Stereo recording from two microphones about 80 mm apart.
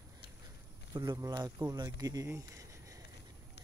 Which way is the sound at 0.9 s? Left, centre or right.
Right.